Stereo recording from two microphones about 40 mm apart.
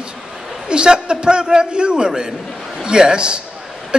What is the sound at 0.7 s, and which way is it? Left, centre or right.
Speech, right.